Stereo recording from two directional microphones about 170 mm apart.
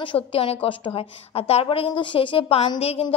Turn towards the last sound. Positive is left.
turn(degrees=35)  # may be behind; listen again after turning